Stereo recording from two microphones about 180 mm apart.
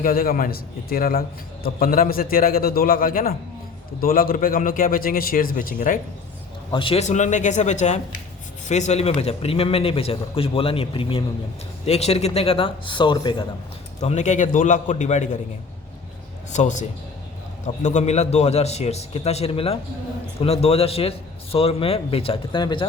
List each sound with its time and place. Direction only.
0.0 s a man's voice: 55° left (ahead or behind)
6.7 s a man's voice: 30° left (ahead or behind)
14.0 s a man's voice: 40° left (ahead or behind)
16.5 s a man's voice: 40° left (ahead or behind)
17.8 s a man's voice: 40° left (ahead or behind)